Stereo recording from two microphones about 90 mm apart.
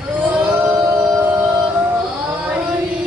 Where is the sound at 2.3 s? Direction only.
10° right (ahead or behind).